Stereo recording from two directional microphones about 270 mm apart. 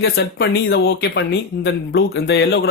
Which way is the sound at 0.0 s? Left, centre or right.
Left.